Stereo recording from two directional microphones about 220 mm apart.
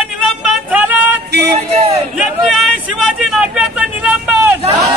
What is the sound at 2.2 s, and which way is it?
Vehicle, centre (ahead or behind).